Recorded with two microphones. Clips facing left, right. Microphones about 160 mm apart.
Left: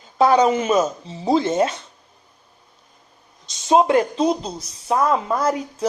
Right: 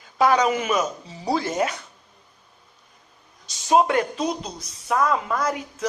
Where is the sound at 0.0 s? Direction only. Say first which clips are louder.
Left 4 dB; 30° left (ahead or behind).